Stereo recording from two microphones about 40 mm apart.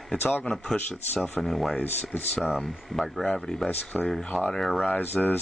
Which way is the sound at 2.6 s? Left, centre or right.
Centre.